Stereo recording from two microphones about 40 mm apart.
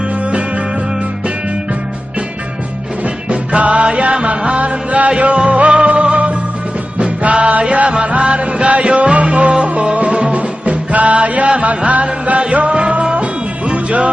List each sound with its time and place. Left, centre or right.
0.3 s music: right
3.0 s music: right